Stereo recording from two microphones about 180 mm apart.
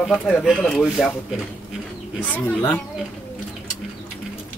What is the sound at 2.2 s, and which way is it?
Speech, 10° left (ahead or behind).